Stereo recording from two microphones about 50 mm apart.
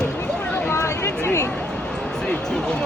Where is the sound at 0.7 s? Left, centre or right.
Left.